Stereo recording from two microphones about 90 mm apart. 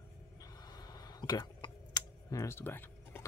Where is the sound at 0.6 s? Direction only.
45° left (ahead or behind).